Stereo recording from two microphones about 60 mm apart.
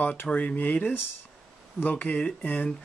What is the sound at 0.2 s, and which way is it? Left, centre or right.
Speech, left.